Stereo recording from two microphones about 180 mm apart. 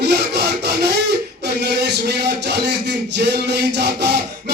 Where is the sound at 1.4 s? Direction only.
65° right (ahead or behind).